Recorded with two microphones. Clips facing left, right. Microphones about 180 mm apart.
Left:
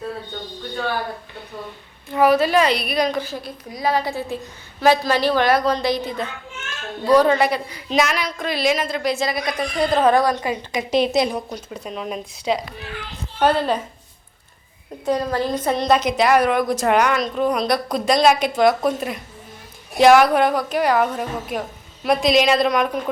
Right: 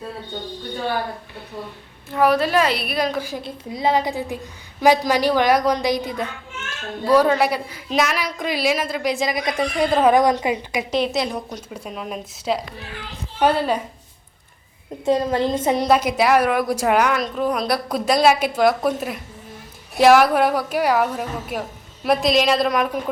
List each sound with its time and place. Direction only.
2.0 s a woman's voice: centre (ahead or behind)
3.4 s a woman's voice: 25° right (ahead or behind)
10.9 s a woman's voice: 15° left (ahead or behind)
11.3 s a woman's voice: centre (ahead or behind)
15.0 s a woman's voice: 25° right (ahead or behind)
15.8 s a woman's voice: 10° right (ahead or behind)